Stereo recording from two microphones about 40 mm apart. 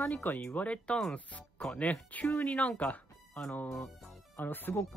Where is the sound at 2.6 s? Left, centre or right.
Left.